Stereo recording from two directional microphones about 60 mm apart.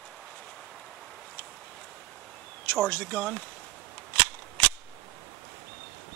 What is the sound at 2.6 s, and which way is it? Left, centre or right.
Speech, centre.